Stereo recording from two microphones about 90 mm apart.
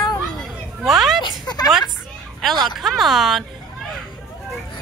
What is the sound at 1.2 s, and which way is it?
Speech, 50° left (ahead or behind).